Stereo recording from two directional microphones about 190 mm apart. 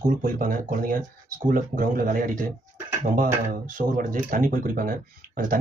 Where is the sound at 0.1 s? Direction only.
45° right (ahead or behind).